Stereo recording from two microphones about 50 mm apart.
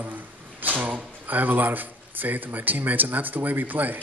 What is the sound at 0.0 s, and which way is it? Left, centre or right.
A man's voice, right.